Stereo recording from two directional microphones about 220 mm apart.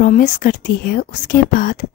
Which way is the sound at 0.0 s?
40° left (ahead or behind).